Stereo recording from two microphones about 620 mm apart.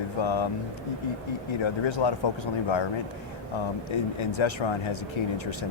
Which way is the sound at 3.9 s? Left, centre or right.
Left.